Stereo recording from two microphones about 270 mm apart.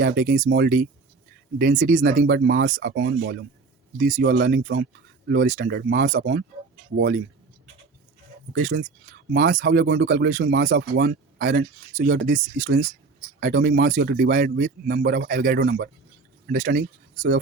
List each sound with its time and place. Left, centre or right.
0.0 s speech: right
8.5 s speech: right